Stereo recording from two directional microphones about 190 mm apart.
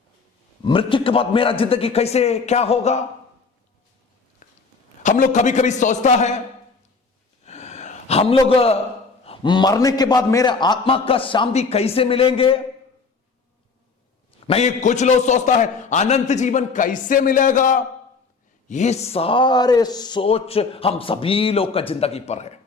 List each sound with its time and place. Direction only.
0.6 s a man's voice: 25° left (ahead or behind)
4.4 s a sound: 40° left (ahead or behind)
5.0 s a man's voice: 40° left (ahead or behind)
7.4 s a sound: 35° left (ahead or behind)
8.4 s speech: 30° left (ahead or behind)
14.4 s a man's voice: 35° left (ahead or behind)